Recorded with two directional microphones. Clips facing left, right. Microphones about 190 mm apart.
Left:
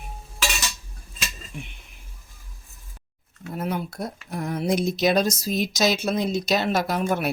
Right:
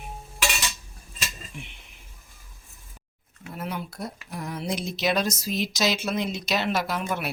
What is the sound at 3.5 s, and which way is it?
Speech, 45° left (ahead or behind).